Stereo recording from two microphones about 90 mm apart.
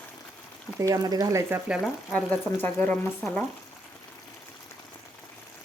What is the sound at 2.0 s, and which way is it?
Speech, 10° left (ahead or behind).